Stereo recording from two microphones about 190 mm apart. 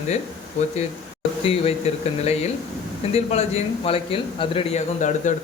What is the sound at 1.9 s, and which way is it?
Speech, 35° left (ahead or behind).